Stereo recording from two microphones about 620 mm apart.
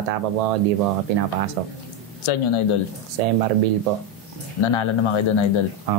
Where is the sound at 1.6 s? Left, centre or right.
Right.